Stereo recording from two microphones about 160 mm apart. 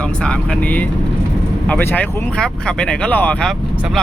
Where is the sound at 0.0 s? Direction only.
5° left (ahead or behind).